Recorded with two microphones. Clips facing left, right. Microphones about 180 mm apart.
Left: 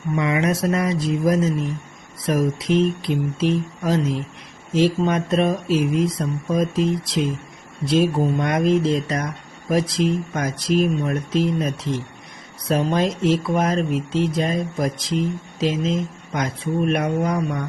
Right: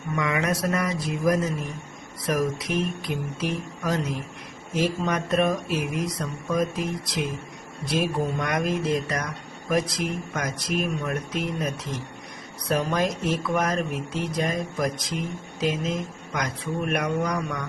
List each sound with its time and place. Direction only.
0.1 s speech: 25° left (ahead or behind)